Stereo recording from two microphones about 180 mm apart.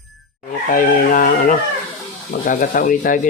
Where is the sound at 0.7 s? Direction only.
50° left (ahead or behind).